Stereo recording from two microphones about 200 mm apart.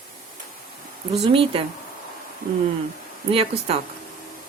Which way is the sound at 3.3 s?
30° right (ahead or behind).